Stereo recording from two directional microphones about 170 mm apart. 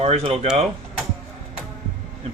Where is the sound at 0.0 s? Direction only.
35° right (ahead or behind).